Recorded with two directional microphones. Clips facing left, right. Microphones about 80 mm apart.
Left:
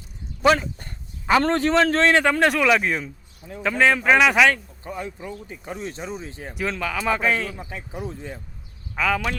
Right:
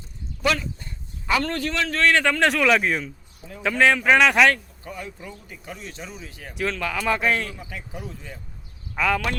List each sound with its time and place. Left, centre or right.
0.4 s a sound: left
1.4 s a man's voice: left
2.2 s speech: centre
3.0 s speech: centre
3.6 s speech: centre
4.8 s speech: left
6.6 s speech: centre
7.5 s speech: left
9.0 s speech: centre